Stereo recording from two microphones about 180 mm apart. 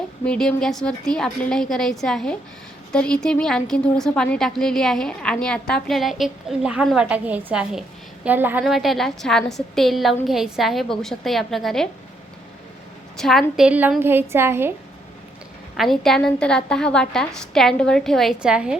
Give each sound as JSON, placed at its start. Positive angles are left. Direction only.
{"t": 0.3, "sound": "a woman's voice", "side_deg": 5}
{"t": 13.1, "sound": "a woman's voice", "side_deg": 0}
{"t": 15.8, "sound": "a woman's voice", "side_deg": 0}